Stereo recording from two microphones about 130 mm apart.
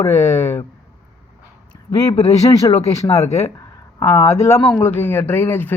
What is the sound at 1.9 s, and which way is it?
Speech, 25° left (ahead or behind).